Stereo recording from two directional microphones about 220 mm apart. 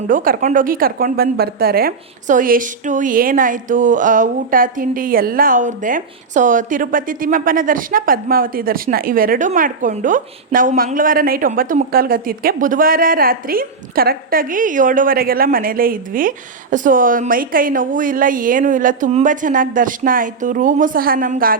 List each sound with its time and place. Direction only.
0.1 s a woman's voice: 35° right (ahead or behind)